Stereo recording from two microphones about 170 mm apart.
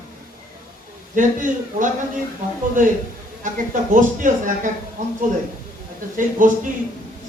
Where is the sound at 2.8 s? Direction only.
50° right (ahead or behind).